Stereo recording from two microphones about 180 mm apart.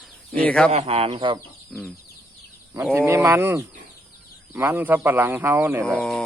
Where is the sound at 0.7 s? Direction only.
35° right (ahead or behind).